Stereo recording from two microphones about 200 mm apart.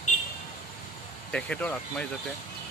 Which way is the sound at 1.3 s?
5° left (ahead or behind).